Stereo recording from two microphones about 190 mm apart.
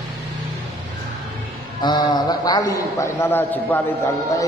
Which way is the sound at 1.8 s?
20° left (ahead or behind).